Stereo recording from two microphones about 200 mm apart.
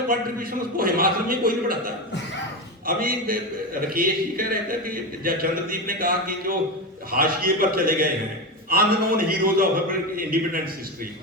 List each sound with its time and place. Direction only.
0.1 s a man's voice: 45° right (ahead or behind)